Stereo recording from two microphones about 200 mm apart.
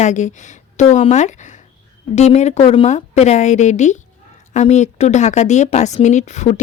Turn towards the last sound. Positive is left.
turn(degrees=35)  # may be behind; listen again after turning